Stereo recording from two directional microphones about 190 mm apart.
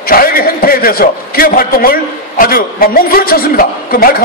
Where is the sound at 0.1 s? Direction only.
50° left (ahead or behind).